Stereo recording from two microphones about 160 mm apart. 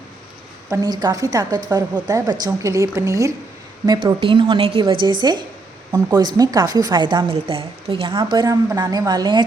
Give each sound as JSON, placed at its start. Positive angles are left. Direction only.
{"t": 0.7, "sound": "a woman's voice", "side_deg": -25}